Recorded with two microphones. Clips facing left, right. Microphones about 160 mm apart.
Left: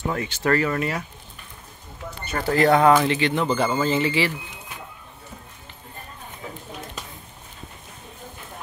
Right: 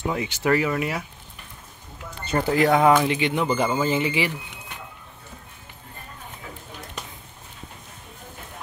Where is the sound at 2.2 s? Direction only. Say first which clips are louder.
Right 3 dB; 25° right (ahead or behind).